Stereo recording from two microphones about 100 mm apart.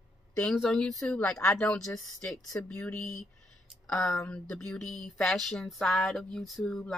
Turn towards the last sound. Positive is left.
turn(degrees=0)  # may be behind; listen again after turning